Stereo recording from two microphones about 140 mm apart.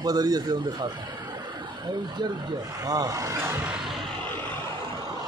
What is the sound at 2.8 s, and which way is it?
Speech, 25° right (ahead or behind).